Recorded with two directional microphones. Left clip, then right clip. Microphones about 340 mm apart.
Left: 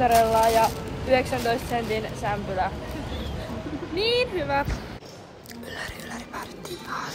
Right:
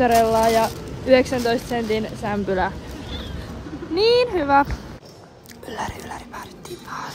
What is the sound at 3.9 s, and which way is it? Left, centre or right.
Speech, centre.